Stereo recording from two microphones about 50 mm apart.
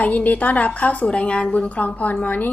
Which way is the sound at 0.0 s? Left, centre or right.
Left.